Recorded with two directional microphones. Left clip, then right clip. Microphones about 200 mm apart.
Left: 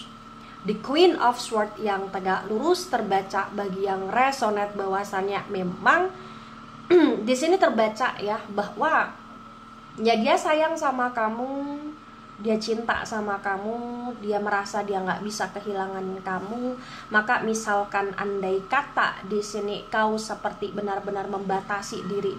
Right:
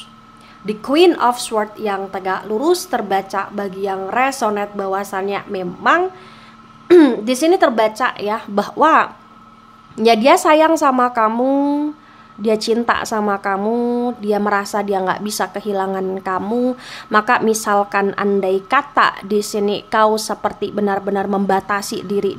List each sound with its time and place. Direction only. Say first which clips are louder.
0.7 s a woman's voice: right 7 dB; 35° right (ahead or behind)
12.4 s a woman's voice: right 9 dB; 45° right (ahead or behind)